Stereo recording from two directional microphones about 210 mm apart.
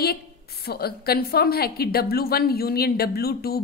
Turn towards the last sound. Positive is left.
turn(degrees=45)  # may be behind; listen again after turning